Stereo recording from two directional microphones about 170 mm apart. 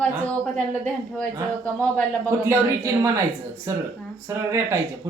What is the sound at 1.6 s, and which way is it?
Speech, 5° left (ahead or behind).